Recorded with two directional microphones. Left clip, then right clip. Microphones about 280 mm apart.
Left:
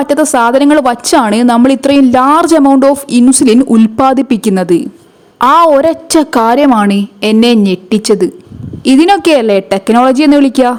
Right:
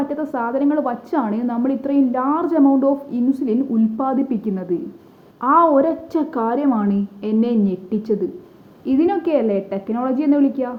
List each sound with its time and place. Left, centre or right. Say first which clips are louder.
0.0 s a woman's voice: left 14 dB; left